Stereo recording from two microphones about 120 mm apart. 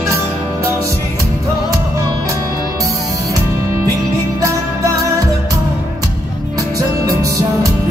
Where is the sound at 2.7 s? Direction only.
30° right (ahead or behind).